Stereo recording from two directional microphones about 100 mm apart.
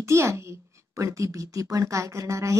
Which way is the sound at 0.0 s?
30° right (ahead or behind).